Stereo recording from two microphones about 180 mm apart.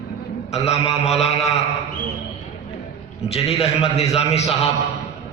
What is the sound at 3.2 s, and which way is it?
A man's voice, 35° left (ahead or behind).